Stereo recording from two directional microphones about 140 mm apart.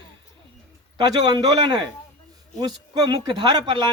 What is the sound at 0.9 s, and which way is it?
A man's voice, 30° right (ahead or behind).